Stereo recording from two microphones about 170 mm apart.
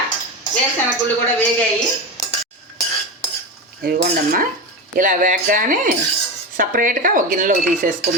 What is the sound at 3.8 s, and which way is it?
Cutlery, 65° right (ahead or behind).